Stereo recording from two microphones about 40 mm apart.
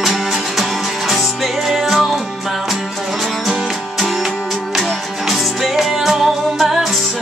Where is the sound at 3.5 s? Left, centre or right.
Centre.